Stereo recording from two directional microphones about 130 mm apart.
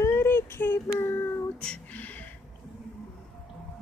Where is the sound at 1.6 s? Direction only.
5° left (ahead or behind).